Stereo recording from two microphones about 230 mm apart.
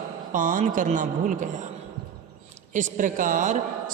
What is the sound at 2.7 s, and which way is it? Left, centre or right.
Speech, right.